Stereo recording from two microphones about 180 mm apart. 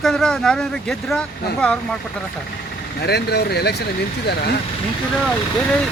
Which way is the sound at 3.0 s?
65° left (ahead or behind).